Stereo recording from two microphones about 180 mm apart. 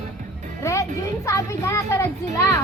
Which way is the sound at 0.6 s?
15° left (ahead or behind).